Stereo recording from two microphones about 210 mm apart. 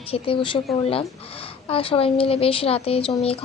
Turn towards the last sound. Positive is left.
turn(degrees=25)  # may be behind; listen again after turning